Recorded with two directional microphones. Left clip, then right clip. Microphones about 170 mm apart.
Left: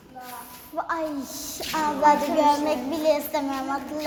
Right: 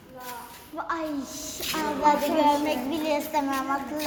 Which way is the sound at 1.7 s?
30° left (ahead or behind).